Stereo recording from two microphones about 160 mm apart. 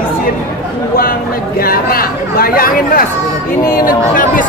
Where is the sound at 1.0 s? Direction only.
65° left (ahead or behind).